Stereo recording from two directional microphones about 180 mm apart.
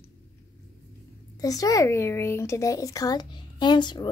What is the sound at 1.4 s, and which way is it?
Speech, 20° left (ahead or behind).